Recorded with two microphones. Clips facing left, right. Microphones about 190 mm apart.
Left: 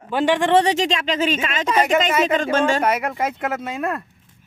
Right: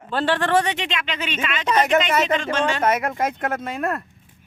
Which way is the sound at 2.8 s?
10° left (ahead or behind).